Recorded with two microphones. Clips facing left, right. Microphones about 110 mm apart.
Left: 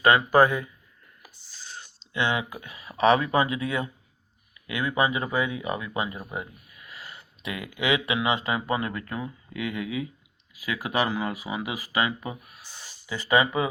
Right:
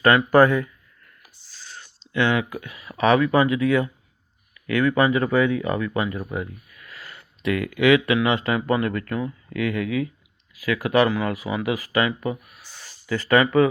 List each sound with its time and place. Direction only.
0.0 s speech: 20° left (ahead or behind)
1.7 s whispering: 25° left (ahead or behind)
3.0 s speech: 30° left (ahead or behind)
10.5 s a sound: 25° left (ahead or behind)
10.8 s speech: 25° left (ahead or behind)